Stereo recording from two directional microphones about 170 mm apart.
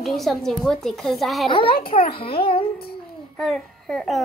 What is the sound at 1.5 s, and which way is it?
A child's voice, 30° left (ahead or behind).